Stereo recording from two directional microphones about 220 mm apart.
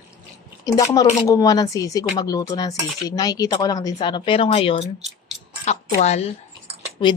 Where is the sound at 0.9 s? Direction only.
15° left (ahead or behind).